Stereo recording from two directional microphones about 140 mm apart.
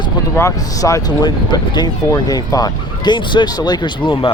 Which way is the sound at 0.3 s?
20° left (ahead or behind).